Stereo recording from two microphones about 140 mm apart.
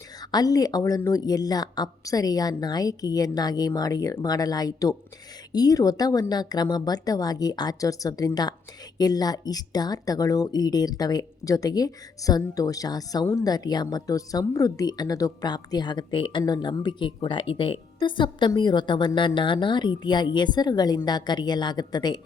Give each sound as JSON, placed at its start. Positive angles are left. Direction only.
{"t": 0.2, "sound": "a woman's voice", "side_deg": 30}